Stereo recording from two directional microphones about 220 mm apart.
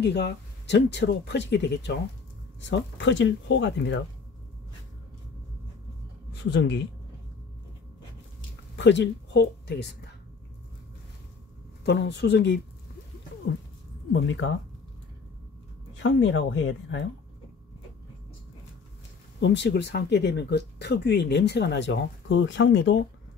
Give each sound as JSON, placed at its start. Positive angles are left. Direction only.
{"t": 0.0, "sound": "speech", "side_deg": 50}
{"t": 6.3, "sound": "speech", "side_deg": 50}
{"t": 8.7, "sound": "speech", "side_deg": 55}
{"t": 11.8, "sound": "speech", "side_deg": 50}
{"t": 14.1, "sound": "speech", "side_deg": 55}
{"t": 16.0, "sound": "speech", "side_deg": 55}
{"t": 19.4, "sound": "speech", "side_deg": 50}